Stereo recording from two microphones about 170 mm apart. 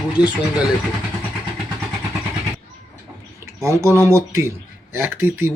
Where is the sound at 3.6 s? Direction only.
15° right (ahead or behind).